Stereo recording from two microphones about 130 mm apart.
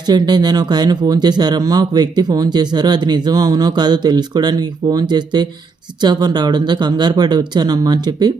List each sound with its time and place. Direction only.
0.0 s speech: 30° right (ahead or behind)